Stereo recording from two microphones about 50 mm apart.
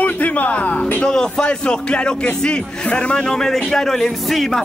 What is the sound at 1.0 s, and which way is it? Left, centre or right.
A man's voice, centre.